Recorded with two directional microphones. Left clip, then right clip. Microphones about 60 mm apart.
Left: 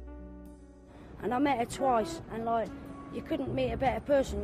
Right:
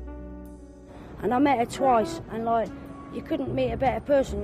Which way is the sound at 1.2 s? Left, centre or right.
Left.